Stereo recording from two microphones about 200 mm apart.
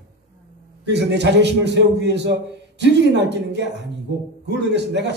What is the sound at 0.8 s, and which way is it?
A man's voice, 60° right (ahead or behind).